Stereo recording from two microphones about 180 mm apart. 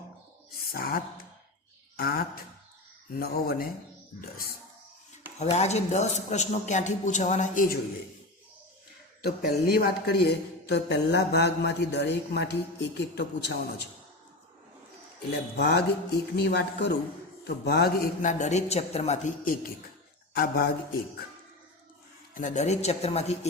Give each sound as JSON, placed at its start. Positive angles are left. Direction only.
{"t": 0.7, "sound": "speech", "side_deg": 55}
{"t": 5.4, "sound": "a man's voice", "side_deg": 40}
{"t": 9.2, "sound": "speech", "side_deg": 60}
{"t": 15.5, "sound": "speech", "side_deg": 65}
{"t": 20.3, "sound": "speech", "side_deg": 55}
{"t": 22.4, "sound": "a man's voice", "side_deg": 40}